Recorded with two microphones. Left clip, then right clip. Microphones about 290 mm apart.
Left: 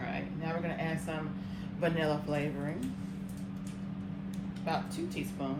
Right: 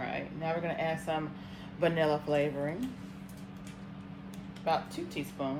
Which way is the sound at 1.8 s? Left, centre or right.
Right.